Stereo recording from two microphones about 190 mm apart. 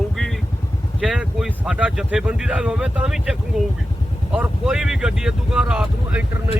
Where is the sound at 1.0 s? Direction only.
5° right (ahead or behind).